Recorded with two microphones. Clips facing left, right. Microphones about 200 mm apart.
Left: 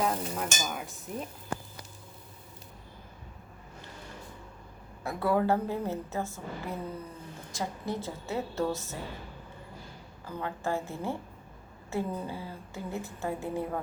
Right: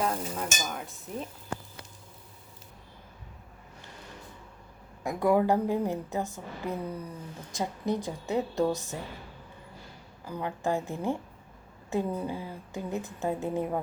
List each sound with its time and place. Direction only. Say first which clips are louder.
0.0 s stir: even; centre (ahead or behind)
5.0 s speech: right 3 dB; 15° right (ahead or behind)
10.2 s speech: right 3 dB; 15° right (ahead or behind)